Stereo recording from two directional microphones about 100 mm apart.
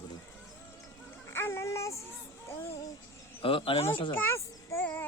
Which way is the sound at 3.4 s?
60° left (ahead or behind).